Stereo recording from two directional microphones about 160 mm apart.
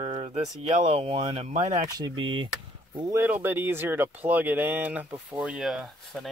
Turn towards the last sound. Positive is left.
turn(degrees=0)  # may be behind; listen again after turning